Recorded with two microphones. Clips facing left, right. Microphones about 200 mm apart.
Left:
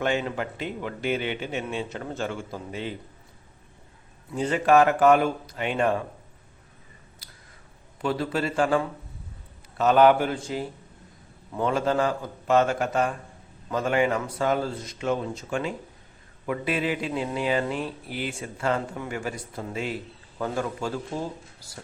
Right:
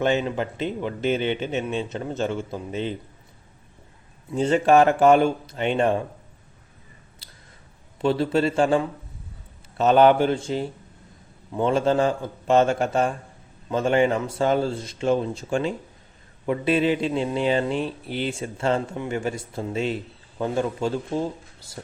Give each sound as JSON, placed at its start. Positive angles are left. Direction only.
{"t": 0.0, "sound": "a man's voice", "side_deg": -20}
{"t": 4.3, "sound": "a man's voice", "side_deg": -25}
{"t": 7.2, "sound": "a sound", "side_deg": -25}
{"t": 8.0, "sound": "a man's voice", "side_deg": -25}